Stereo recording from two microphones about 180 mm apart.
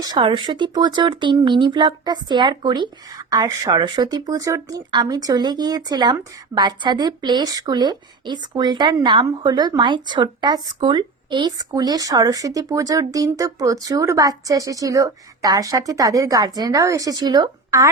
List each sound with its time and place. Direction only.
0.0 s speech: 25° right (ahead or behind)